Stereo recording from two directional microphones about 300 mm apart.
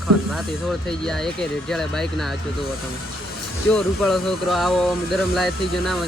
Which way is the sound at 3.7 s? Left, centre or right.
Centre.